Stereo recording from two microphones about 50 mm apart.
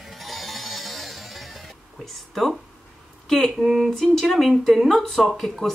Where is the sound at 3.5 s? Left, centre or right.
Centre.